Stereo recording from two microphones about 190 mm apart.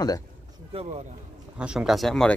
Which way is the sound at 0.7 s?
30° right (ahead or behind).